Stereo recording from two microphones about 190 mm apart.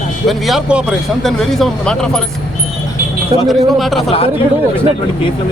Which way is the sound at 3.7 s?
Centre (ahead or behind).